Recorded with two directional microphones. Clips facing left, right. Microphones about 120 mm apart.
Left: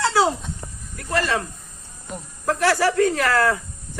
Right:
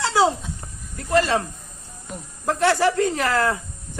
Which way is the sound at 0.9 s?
20° right (ahead or behind).